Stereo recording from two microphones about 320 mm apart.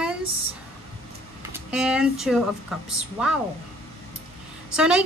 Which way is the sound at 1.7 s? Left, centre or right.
Centre.